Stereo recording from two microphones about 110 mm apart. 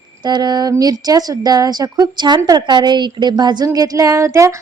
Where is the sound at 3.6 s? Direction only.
35° right (ahead or behind).